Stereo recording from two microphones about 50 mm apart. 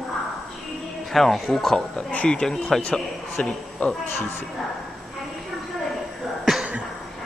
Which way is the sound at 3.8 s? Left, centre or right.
Left.